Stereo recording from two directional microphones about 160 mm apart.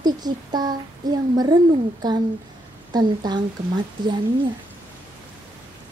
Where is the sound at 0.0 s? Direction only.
25° right (ahead or behind).